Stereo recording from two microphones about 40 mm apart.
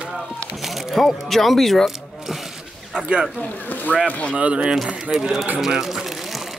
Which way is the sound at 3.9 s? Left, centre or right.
Left.